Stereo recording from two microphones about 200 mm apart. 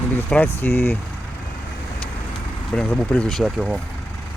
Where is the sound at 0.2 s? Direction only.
10° left (ahead or behind).